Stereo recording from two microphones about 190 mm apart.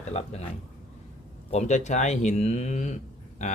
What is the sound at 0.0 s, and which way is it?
Speech, 35° left (ahead or behind).